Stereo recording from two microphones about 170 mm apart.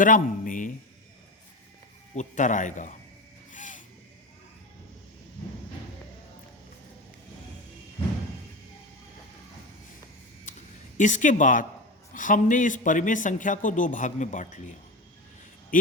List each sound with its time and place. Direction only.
0.0 s a man's voice: 50° left (ahead or behind)
2.1 s a man's voice: 45° left (ahead or behind)
3.5 s vehicle: 50° left (ahead or behind)
10.5 s a sound: 50° left (ahead or behind)
10.9 s a man's voice: 45° left (ahead or behind)
15.7 s a man's voice: 55° left (ahead or behind)